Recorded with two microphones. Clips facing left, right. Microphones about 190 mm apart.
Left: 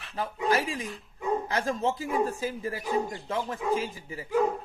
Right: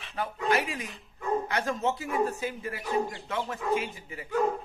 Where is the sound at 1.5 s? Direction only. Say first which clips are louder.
Left 1 dB; 30° left (ahead or behind).